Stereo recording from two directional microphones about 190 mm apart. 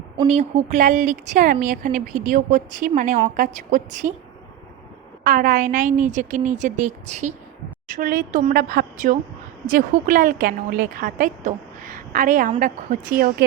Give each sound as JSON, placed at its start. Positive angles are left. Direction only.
{"t": 0.3, "sound": "speech", "side_deg": -35}
{"t": 5.2, "sound": "a woman's voice", "side_deg": -45}